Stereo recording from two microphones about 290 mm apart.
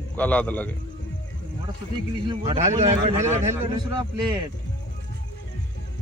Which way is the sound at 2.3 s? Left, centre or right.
Centre.